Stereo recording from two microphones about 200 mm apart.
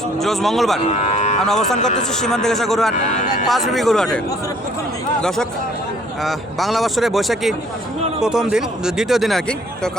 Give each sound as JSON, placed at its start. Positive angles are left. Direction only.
{"t": 0.2, "sound": "speech", "side_deg": 0}
{"t": 0.9, "sound": "cattle", "side_deg": 35}
{"t": 2.0, "sound": "speech", "side_deg": 5}
{"t": 6.2, "sound": "speech", "side_deg": 0}